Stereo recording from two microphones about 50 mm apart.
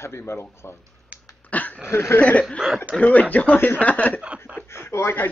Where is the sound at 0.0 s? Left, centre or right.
Left.